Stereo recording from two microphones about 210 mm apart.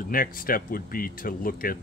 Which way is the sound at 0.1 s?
40° left (ahead or behind).